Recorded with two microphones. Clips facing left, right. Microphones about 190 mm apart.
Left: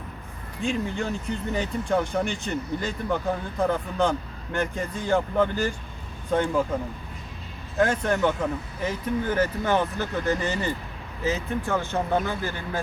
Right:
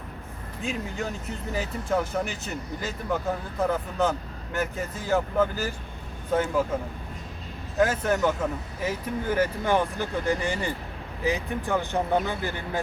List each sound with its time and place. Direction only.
0.6 s speech: 5° right (ahead or behind)
7.8 s speech: 5° right (ahead or behind)